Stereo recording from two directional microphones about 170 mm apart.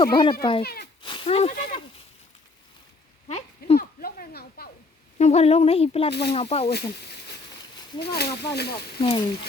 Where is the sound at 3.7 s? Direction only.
65° left (ahead or behind).